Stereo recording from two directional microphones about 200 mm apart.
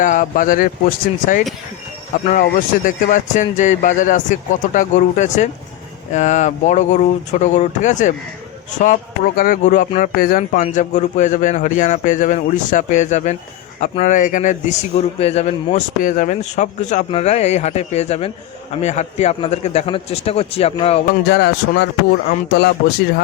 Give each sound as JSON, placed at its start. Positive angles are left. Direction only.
{"t": 0.0, "sound": "speech", "side_deg": 40}
{"t": 2.2, "sound": "speech", "side_deg": 40}
{"t": 21.2, "sound": "speech", "side_deg": 55}